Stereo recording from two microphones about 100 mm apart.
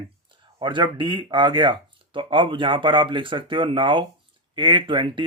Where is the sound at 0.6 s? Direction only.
50° right (ahead or behind).